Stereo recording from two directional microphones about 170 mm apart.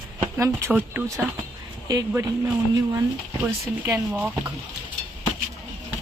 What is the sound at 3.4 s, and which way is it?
Speech, 10° right (ahead or behind).